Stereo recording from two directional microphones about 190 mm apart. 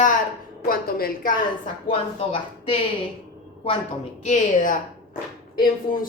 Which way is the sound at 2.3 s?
30° left (ahead or behind).